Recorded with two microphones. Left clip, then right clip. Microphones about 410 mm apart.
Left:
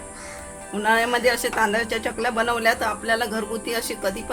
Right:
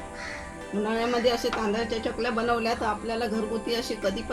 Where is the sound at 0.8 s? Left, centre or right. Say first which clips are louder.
Left 6 dB; centre.